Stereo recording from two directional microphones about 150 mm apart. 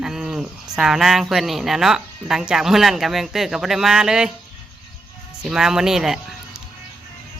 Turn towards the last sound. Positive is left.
turn(degrees=-5)  # may be behind; listen again after turning